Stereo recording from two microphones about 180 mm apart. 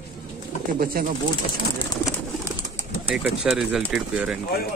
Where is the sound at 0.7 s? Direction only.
55° right (ahead or behind).